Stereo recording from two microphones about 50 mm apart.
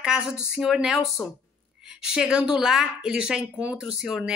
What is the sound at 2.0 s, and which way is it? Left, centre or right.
A woman's voice, centre.